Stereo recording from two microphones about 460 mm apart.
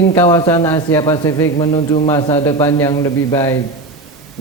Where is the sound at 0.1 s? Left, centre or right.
Centre.